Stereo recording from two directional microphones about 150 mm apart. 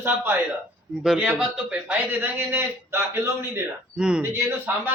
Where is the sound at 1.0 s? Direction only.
5° right (ahead or behind).